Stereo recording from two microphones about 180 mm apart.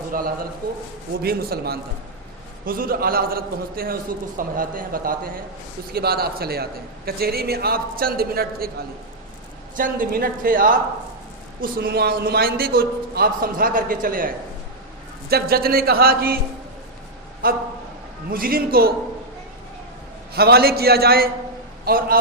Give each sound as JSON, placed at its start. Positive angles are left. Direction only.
{"t": 0.1, "sound": "a man's voice", "side_deg": -50}
{"t": 9.7, "sound": "a man's voice", "side_deg": -50}
{"t": 15.3, "sound": "a man's voice", "side_deg": -60}
{"t": 17.4, "sound": "a man's voice", "side_deg": -55}
{"t": 20.3, "sound": "a man's voice", "side_deg": -60}